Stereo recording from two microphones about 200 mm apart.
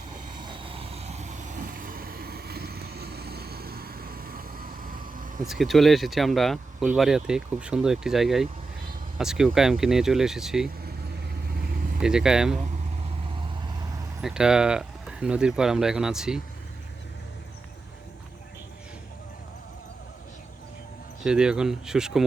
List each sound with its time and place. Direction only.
0.6 s vehicle: 30° right (ahead or behind); by 5.3 s 45° right (ahead or behind)
5.5 s speech: centre (ahead or behind)
11.9 s speech: 5° right (ahead or behind)
14.2 s speech: 5° right (ahead or behind)
21.2 s speech: 5° right (ahead or behind)